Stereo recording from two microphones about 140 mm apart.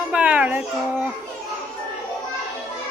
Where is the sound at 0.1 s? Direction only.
10° right (ahead or behind).